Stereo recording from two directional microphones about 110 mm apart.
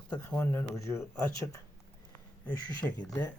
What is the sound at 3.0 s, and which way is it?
Speech, 35° left (ahead or behind).